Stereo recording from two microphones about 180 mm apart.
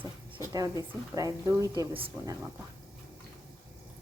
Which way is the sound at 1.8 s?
30° right (ahead or behind).